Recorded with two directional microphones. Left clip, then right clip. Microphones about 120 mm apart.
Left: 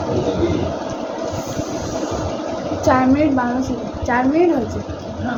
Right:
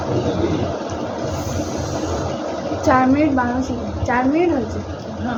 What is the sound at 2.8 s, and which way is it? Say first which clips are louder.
A woman's voice: even; 15° left (ahead or behind).